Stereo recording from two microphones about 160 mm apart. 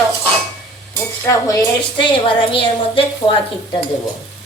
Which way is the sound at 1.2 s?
20° left (ahead or behind).